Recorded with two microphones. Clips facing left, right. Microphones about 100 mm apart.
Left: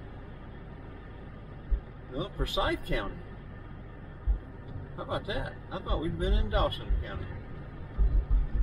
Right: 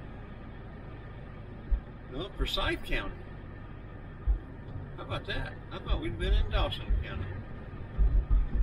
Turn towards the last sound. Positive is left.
turn(degrees=30)  # may be behind; listen again after turning